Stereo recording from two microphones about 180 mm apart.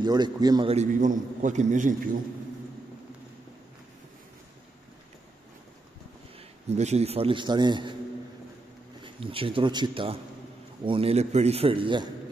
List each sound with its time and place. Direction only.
0.0 s a man's voice: 20° right (ahead or behind)
0.7 s a man's voice: 40° right (ahead or behind)
6.7 s a man's voice: 35° right (ahead or behind)
9.0 s a man's voice: 30° right (ahead or behind)